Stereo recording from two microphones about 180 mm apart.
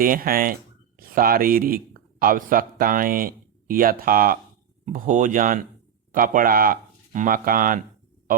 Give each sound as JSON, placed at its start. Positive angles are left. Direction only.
{"t": 0.0, "sound": "speech", "side_deg": -50}